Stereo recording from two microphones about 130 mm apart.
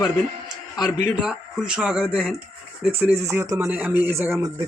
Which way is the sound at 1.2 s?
5° right (ahead or behind).